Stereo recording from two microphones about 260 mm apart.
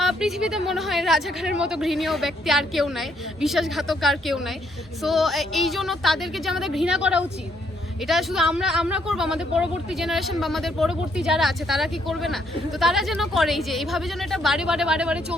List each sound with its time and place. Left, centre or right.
0.0 s speech: centre